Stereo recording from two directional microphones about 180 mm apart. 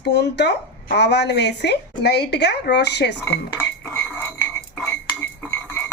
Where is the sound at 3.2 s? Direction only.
10° left (ahead or behind).